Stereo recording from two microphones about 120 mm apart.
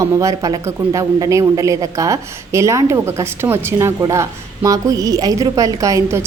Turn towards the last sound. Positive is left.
turn(degrees=-25)  # may be behind; listen again after turning